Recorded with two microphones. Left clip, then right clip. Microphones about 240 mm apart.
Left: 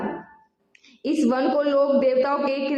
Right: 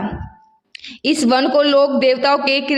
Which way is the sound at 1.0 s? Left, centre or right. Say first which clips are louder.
Right 6 dB; right.